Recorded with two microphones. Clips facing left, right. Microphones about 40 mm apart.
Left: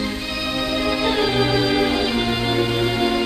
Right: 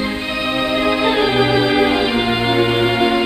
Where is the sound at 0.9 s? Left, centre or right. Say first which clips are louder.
Right 4 dB; right.